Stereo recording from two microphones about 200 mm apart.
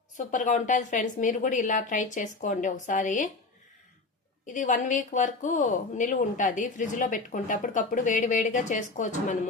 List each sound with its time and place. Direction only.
0.2 s speech: 40° left (ahead or behind)
4.4 s speech: 40° left (ahead or behind)